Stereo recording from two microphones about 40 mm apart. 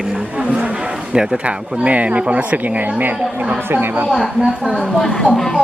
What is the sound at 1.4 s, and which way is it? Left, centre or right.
Speech, right.